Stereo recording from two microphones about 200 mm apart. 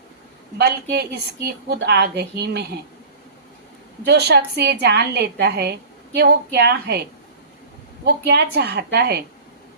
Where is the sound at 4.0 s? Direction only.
55° right (ahead or behind).